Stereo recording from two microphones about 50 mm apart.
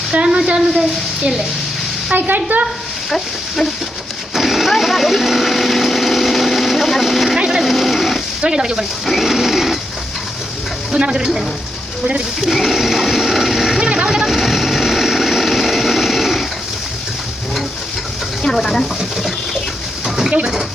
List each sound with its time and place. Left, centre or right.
0.3 s speech: centre
2.1 s a woman's voice: right
3.1 s speech: centre
4.4 s vehicle: centre
7.3 s a sound: centre
7.6 s a sound: centre
8.4 s speech: centre
10.9 s speech: centre
12.4 s sewing machine: centre
13.8 s sewing machine: centre
18.4 s speech: centre
20.1 s a sound: centre